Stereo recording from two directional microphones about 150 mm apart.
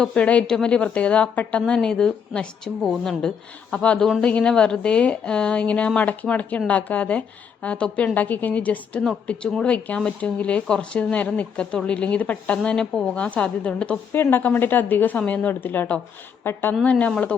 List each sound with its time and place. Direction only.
0.0 s a woman's voice: 10° left (ahead or behind)